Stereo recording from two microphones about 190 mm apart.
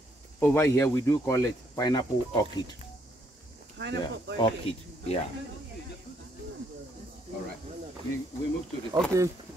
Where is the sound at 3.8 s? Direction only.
65° right (ahead or behind).